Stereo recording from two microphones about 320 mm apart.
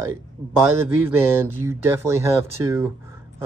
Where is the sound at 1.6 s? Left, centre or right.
Centre.